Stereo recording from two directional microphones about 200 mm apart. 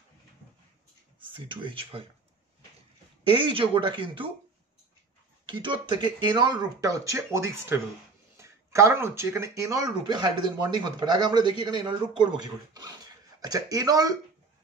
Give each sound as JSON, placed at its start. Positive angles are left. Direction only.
{"t": 1.3, "sound": "speech", "side_deg": -25}
{"t": 3.3, "sound": "speech", "side_deg": -25}
{"t": 5.5, "sound": "speech", "side_deg": -25}